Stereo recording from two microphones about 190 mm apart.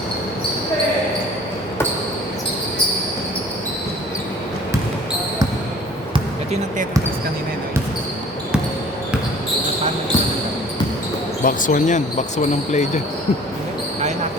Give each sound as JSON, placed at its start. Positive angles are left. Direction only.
{"t": 6.1, "sound": "basketball bounce", "side_deg": -35}
{"t": 11.4, "sound": "speech", "side_deg": 45}